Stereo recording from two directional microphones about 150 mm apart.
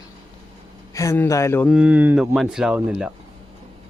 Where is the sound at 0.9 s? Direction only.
20° left (ahead or behind).